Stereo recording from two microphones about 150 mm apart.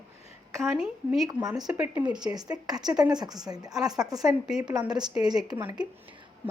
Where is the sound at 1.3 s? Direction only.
25° right (ahead or behind).